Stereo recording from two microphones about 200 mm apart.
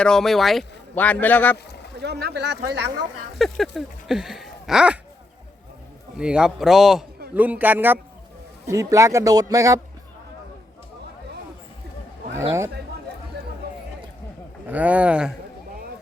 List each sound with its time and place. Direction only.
0.0 s speech: centre (ahead or behind)
2.0 s speech: 55° right (ahead or behind)
3.3 s speech: centre (ahead or behind)
6.1 s a man's voice: 5° right (ahead or behind)
12.3 s a man's voice: 15° right (ahead or behind)
14.7 s a man's voice: 5° right (ahead or behind)